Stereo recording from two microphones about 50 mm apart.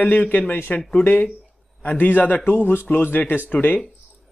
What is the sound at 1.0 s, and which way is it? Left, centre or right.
Speech, left.